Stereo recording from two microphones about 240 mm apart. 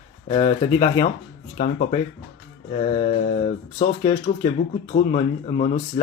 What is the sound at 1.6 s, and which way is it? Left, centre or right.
Speech, left.